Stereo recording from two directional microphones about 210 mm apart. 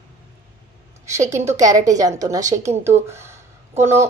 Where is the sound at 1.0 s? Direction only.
15° right (ahead or behind).